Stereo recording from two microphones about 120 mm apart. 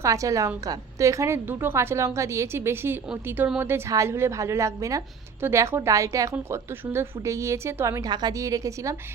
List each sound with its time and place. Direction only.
0.0 s a woman's voice: 25° right (ahead or behind)